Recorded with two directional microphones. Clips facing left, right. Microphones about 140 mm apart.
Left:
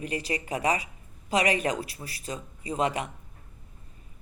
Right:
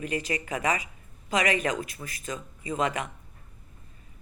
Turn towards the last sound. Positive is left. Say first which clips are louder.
# left 1 dB
turn(degrees=35)  # may be behind; listen again after turning